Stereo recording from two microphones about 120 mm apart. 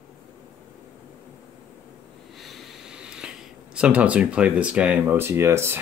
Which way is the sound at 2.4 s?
5° right (ahead or behind).